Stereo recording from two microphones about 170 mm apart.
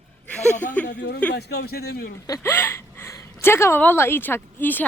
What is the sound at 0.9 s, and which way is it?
Speech, 85° left.